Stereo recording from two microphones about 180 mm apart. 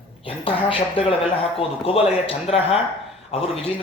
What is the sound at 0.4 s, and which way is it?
Speech, 30° left (ahead or behind).